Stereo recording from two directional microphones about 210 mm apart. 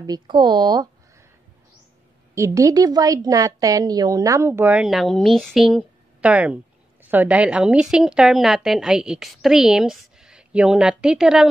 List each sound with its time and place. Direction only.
0.0 s speech: 20° right (ahead or behind)
2.3 s a woman's voice: 15° right (ahead or behind)